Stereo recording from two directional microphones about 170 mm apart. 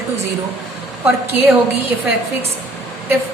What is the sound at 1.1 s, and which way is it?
Speech, 15° right (ahead or behind).